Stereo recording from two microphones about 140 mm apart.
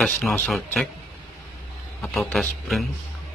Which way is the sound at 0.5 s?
5° left (ahead or behind).